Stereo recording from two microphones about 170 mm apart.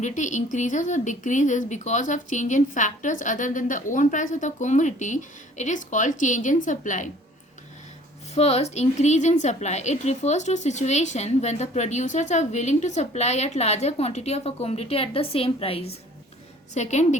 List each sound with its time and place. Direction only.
0.0 s speech: 45° left (ahead or behind)
8.4 s a woman's voice: 40° left (ahead or behind)